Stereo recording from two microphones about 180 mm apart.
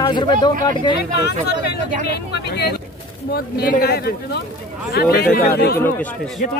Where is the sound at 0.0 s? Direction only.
25° left (ahead or behind).